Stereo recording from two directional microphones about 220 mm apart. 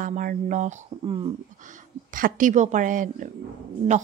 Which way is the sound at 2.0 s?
40° right (ahead or behind).